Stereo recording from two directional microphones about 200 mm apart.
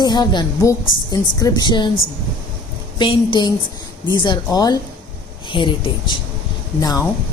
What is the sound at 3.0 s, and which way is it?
A woman's voice, 25° left (ahead or behind).